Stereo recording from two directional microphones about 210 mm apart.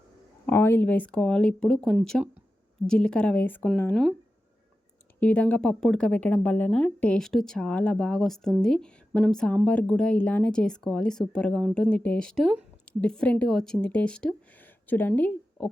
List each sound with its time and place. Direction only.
0.4 s speech: 10° left (ahead or behind)
5.2 s a woman's voice: 5° left (ahead or behind)